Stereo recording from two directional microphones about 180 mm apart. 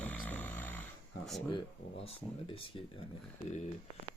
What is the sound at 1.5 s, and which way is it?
Speech, 30° left (ahead or behind).